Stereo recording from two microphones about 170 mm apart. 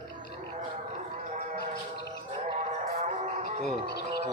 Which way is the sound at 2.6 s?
40° right (ahead or behind).